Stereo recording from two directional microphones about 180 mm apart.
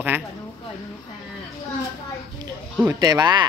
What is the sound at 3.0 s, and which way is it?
Speech, 25° right (ahead or behind).